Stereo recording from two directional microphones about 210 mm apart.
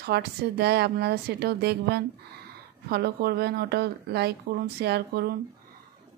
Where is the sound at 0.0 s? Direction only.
50° right (ahead or behind).